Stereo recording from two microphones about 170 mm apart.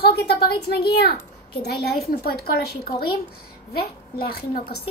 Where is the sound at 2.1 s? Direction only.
65° left (ahead or behind).